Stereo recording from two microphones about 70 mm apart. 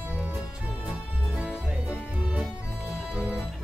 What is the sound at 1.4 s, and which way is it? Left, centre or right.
Music, centre.